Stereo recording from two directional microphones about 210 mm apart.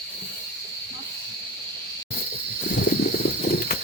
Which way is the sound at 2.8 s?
45° left (ahead or behind).